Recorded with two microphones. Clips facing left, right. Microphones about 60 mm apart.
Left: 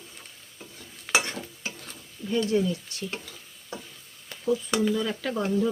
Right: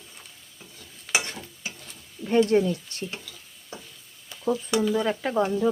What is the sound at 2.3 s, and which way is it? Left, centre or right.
Speech, right.